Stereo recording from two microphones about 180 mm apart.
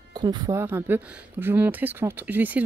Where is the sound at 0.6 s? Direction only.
10° right (ahead or behind).